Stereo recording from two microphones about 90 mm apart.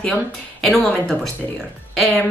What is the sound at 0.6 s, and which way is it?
Speech, 5° left (ahead or behind).